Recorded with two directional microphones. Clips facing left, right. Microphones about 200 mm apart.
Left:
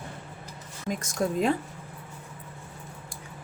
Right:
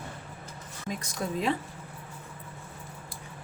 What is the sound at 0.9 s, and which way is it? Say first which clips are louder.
Speech: left 5 dB; 45° left (ahead or behind).